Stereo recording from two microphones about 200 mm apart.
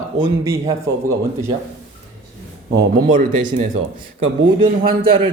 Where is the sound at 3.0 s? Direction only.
40° right (ahead or behind).